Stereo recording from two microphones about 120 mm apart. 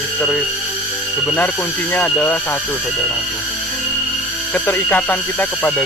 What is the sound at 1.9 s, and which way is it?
Speech, 15° left (ahead or behind).